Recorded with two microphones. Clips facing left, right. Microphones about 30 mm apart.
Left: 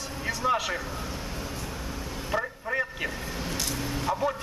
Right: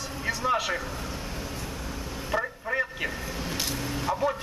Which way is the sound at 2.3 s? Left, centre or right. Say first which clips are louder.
Right 1 dB; centre.